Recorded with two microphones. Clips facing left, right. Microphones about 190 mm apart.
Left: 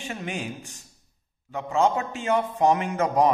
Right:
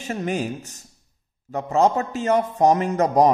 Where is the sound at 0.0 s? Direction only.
40° right (ahead or behind).